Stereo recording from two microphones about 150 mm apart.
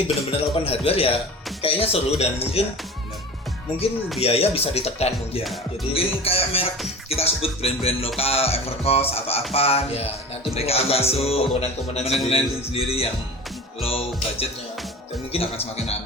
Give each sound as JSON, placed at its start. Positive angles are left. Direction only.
{"t": 0.3, "sound": "music", "side_deg": 40}
{"t": 4.2, "sound": "music", "side_deg": 40}
{"t": 5.4, "sound": "music", "side_deg": 0}
{"t": 5.9, "sound": "music", "side_deg": 40}